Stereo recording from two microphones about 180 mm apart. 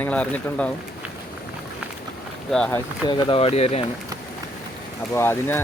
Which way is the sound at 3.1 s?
25° left (ahead or behind).